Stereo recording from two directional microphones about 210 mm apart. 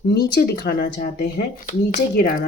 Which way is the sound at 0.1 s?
50° left (ahead or behind).